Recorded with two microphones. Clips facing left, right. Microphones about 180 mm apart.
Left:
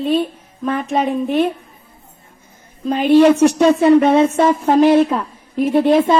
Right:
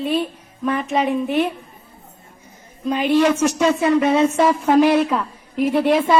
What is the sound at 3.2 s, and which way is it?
Speech, 35° left (ahead or behind).